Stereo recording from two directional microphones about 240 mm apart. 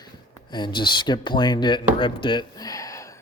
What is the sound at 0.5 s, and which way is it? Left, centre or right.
Speech, centre.